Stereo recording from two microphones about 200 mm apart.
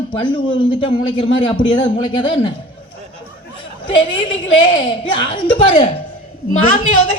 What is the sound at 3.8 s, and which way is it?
A woman's voice, 25° left (ahead or behind).